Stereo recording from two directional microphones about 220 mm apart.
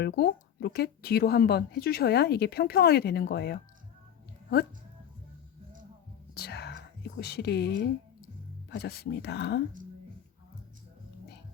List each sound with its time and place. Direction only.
0.0 s a woman's voice: 45° left (ahead or behind)
6.3 s whispering: 45° left (ahead or behind)
7.2 s a woman's voice: 45° left (ahead or behind)